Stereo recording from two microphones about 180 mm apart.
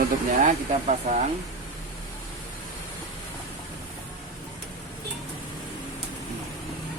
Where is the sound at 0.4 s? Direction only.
40° right (ahead or behind).